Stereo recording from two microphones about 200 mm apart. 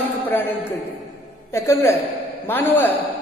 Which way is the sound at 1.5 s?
15° left (ahead or behind).